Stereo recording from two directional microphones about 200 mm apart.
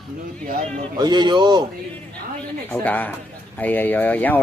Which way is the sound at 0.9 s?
20° right (ahead or behind).